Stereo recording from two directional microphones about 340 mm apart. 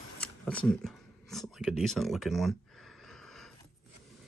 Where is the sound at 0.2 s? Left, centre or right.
Centre.